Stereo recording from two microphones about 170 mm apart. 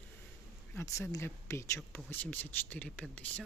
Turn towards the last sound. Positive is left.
turn(degrees=10)  # may be behind; listen again after turning